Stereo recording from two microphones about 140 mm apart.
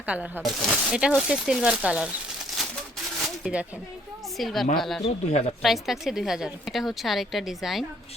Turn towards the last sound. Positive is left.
turn(degrees=0)  # may be behind; listen again after turning